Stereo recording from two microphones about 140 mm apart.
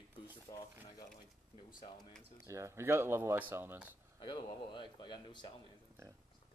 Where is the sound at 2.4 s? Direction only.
20° right (ahead or behind).